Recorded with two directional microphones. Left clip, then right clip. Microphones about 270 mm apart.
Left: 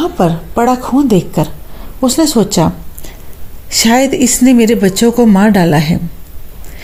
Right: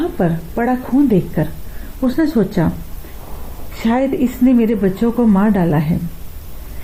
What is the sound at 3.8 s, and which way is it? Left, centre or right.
Speech, left.